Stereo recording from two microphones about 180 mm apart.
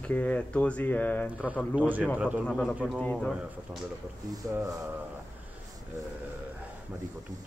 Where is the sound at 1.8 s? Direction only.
10° right (ahead or behind).